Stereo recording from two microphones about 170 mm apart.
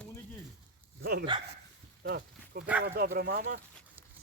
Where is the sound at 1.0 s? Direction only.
65° right (ahead or behind).